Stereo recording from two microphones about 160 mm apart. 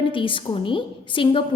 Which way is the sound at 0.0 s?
30° left (ahead or behind).